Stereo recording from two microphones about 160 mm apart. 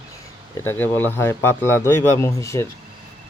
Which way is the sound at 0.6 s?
10° left (ahead or behind).